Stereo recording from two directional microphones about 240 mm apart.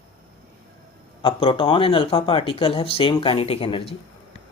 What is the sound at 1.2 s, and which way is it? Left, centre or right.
Speech, left.